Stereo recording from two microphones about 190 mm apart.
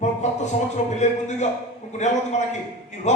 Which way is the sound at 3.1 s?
35° left (ahead or behind).